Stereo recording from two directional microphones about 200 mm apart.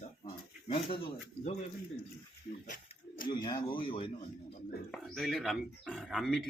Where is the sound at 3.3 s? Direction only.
20° left (ahead or behind).